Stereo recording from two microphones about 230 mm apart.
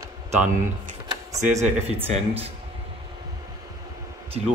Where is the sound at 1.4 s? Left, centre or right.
Right.